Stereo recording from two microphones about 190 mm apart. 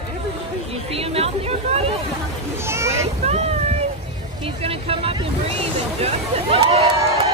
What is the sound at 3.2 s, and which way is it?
Boat, 35° right (ahead or behind).